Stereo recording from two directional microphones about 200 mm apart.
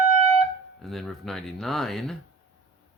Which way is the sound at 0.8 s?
Centre (ahead or behind).